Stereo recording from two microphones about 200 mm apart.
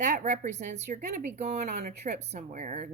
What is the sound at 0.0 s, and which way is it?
Speech, 35° right (ahead or behind).